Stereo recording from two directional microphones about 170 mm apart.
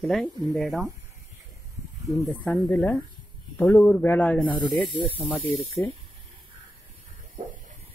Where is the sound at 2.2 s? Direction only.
5° left (ahead or behind).